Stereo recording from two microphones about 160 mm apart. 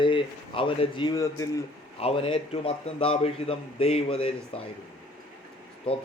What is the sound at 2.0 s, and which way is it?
A man's voice, 35° left (ahead or behind).